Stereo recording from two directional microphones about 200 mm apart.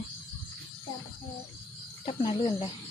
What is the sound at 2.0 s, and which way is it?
Speech, 25° left (ahead or behind).